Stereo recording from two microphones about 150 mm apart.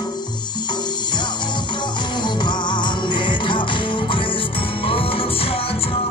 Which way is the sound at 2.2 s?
30° left (ahead or behind).